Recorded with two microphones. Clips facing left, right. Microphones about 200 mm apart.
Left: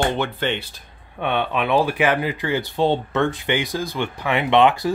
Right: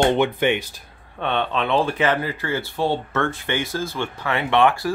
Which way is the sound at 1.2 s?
10° left (ahead or behind).